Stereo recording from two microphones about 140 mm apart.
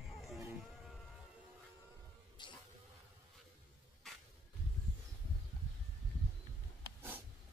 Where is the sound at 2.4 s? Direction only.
35° left (ahead or behind).